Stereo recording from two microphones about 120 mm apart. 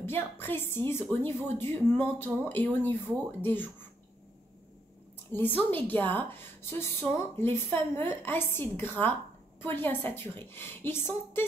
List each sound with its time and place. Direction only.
0.0 s a woman's voice: 20° left (ahead or behind)
5.3 s a woman's voice: 15° left (ahead or behind)